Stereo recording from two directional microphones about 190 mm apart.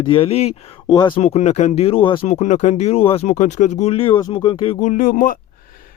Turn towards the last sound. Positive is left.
turn(degrees=45)  # may be behind; listen again after turning